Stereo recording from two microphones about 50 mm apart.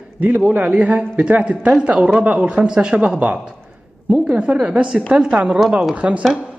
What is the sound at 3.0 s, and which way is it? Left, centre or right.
Speech, right.